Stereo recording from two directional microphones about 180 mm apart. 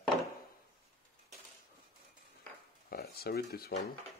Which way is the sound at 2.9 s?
60° left (ahead or behind).